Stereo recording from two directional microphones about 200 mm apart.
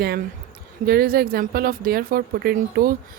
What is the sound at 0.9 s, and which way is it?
A woman's voice, 50° right (ahead or behind).